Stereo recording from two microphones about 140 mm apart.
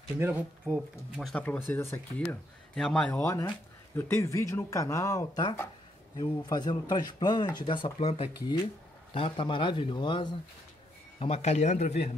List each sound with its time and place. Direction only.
0.2 s speech: 15° right (ahead or behind)
1.2 s speech: 10° left (ahead or behind)
2.7 s speech: 5° left (ahead or behind); by 10.3 s 35° left (ahead or behind)
11.1 s speech: 45° left (ahead or behind)